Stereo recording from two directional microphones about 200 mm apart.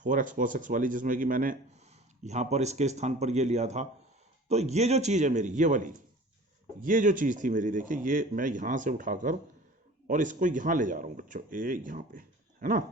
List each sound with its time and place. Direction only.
0.0 s speech: 40° right (ahead or behind)